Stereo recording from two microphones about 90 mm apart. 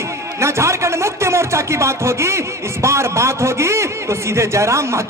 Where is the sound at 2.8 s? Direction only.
30° right (ahead or behind).